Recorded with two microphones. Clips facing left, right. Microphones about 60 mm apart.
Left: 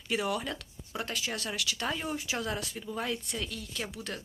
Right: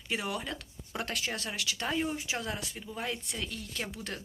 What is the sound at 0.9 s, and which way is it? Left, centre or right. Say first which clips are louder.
Speech: even; right.